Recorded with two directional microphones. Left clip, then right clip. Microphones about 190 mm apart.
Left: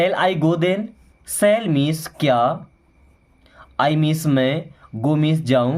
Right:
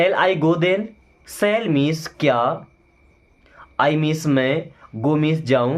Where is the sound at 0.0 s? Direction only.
35° left (ahead or behind).